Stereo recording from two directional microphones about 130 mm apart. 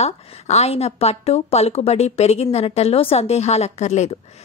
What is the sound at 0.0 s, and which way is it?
A woman's voice, 55° left (ahead or behind).